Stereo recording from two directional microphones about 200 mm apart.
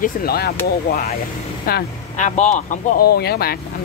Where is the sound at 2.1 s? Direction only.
35° left (ahead or behind).